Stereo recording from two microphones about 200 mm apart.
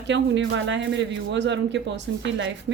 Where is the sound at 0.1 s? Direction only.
65° right (ahead or behind).